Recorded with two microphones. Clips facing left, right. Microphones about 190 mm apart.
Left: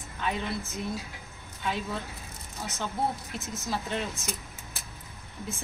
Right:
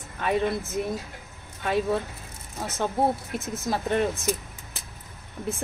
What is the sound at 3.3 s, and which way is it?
Speech, 55° right (ahead or behind).